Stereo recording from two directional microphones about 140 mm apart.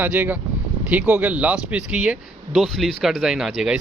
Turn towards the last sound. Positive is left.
turn(degrees=-5)  # may be behind; listen again after turning